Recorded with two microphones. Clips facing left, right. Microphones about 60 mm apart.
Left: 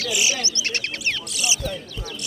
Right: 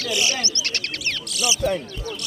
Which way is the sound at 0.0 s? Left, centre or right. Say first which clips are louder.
Even; centre.